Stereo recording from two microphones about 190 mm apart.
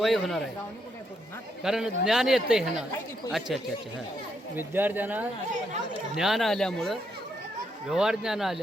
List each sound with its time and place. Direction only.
0.0 s a man's voice: centre (ahead or behind)
1.6 s a man's voice: centre (ahead or behind)